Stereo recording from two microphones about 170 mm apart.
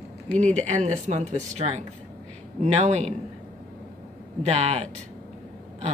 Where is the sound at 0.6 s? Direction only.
45° right (ahead or behind).